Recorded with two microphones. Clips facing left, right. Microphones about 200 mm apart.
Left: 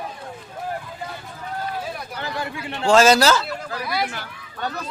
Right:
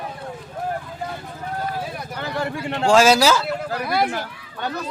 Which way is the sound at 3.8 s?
55° right (ahead or behind).